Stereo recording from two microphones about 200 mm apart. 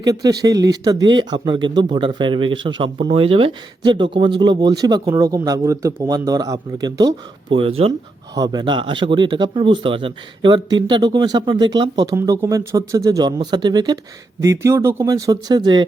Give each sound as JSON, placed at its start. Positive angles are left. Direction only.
{"t": 0.0, "sound": "speech", "side_deg": -20}